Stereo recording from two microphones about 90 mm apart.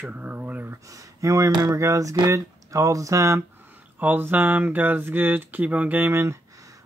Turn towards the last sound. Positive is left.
turn(degrees=-35)  # may be behind; listen again after turning